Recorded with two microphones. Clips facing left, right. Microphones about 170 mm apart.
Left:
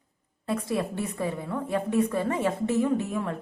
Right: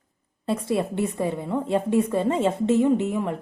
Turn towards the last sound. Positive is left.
turn(degrees=-20)  # may be behind; listen again after turning